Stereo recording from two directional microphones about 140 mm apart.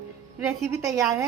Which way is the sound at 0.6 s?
20° right (ahead or behind).